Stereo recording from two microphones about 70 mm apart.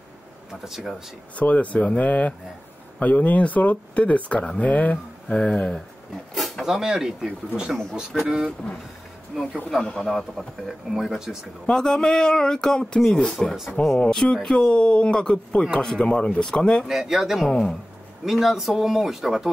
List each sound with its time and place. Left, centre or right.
0.5 s speech: centre
1.3 s speech: left
6.3 s speech: centre
8.1 s speech: centre
9.8 s speech: centre
10.9 s speech: centre
11.6 s speech: centre
16.8 s speech: centre
17.5 s speech: centre
18.2 s speech: centre